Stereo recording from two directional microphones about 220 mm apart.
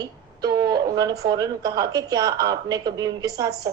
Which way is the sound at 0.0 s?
15° right (ahead or behind).